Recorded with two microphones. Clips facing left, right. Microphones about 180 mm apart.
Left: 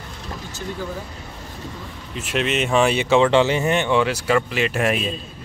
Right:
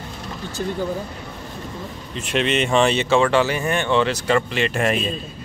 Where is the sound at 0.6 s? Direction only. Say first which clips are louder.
Right 6 dB; 50° right (ahead or behind).